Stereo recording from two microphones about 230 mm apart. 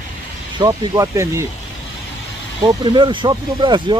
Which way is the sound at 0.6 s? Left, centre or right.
Centre.